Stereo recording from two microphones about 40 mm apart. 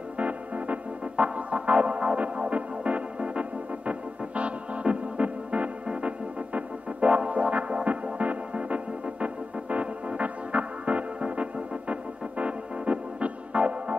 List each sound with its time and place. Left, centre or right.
0.2 s music: right
4.4 s organ: right
5.9 s music: right
11.9 s keyboard: right